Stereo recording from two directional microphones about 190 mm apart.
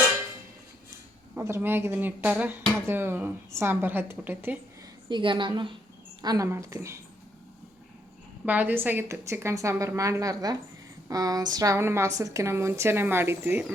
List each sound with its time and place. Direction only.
1.4 s a woman's voice: 10° right (ahead or behind)
5.0 s a woman's voice: 25° right (ahead or behind)
8.4 s a woman's voice: 10° right (ahead or behind)